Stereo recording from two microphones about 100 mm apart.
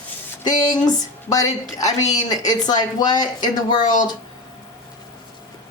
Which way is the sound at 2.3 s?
40° left (ahead or behind).